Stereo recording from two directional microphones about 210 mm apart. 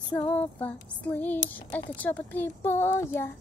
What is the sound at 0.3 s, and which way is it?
Speech, 10° left (ahead or behind).